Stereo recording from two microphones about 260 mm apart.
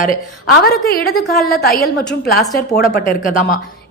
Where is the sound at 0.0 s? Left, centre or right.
Left.